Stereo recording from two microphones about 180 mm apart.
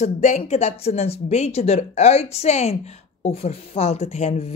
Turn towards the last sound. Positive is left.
turn(degrees=40)  # may be behind; listen again after turning